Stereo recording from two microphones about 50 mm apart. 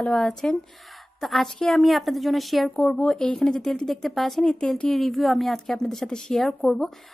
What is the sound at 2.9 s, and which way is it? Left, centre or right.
A woman's voice, centre.